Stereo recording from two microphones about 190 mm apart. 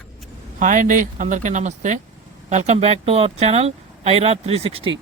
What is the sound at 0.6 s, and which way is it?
Speech, 45° right (ahead or behind).